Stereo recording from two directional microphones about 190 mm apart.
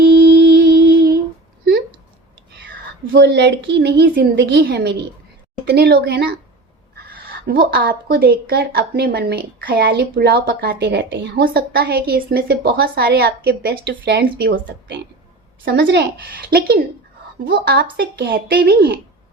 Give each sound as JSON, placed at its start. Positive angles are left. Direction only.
{"t": 0.1, "sound": "music", "side_deg": -60}
{"t": 3.1, "sound": "a woman's voice", "side_deg": -60}
{"t": 7.6, "sound": "a woman's voice", "side_deg": -55}
{"t": 17.5, "sound": "a woman's voice", "side_deg": -55}